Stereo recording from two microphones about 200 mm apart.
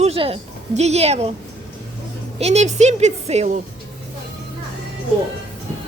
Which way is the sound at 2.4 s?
35° right (ahead or behind).